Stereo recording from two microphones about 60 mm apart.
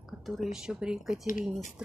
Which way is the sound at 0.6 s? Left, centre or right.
Centre.